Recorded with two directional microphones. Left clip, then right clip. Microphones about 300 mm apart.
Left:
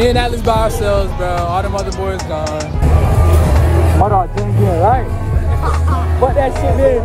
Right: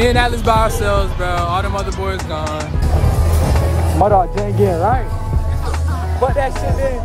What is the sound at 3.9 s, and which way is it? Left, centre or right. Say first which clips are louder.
Speech: right 2 dB; right.